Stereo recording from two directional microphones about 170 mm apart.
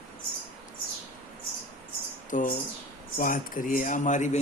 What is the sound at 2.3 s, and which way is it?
Speech, 50° left (ahead or behind).